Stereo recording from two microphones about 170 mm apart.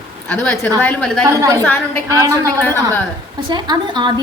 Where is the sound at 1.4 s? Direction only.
20° right (ahead or behind).